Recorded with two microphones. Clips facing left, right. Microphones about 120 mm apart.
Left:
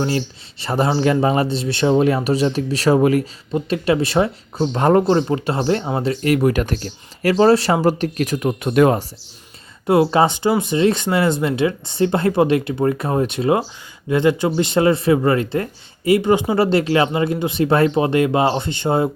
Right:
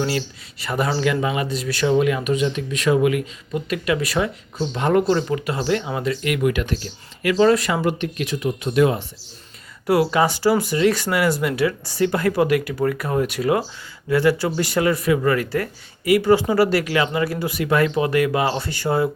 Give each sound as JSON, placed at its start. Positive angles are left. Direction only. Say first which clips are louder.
{"t": 0.6, "sound": "speech", "louder": "left 4 dB", "side_deg": 30}
{"t": 4.6, "sound": "speech", "louder": "left 4 dB", "side_deg": 45}
{"t": 9.8, "sound": "speech", "louder": "left 3 dB", "side_deg": 25}